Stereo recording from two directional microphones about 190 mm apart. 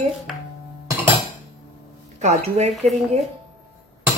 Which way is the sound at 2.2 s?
35° right (ahead or behind).